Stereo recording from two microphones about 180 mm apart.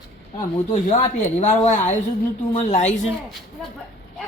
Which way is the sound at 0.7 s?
40° left (ahead or behind).